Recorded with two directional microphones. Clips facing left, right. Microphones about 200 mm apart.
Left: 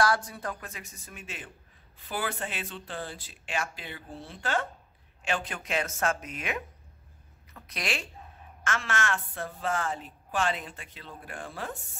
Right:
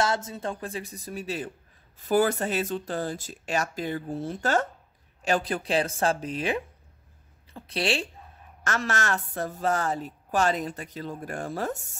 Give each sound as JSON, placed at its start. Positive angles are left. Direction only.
{"t": 0.0, "sound": "a woman's voice", "side_deg": -25}